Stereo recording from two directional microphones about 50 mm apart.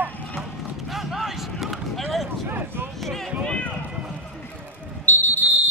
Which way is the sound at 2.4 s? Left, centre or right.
Right.